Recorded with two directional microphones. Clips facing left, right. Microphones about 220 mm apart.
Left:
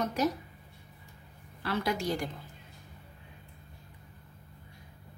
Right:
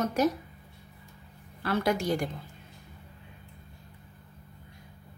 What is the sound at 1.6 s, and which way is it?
Speech, 50° right (ahead or behind).